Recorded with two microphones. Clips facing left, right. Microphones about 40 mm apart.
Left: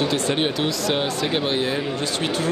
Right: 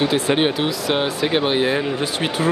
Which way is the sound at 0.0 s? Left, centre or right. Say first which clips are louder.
Right 4 dB; centre.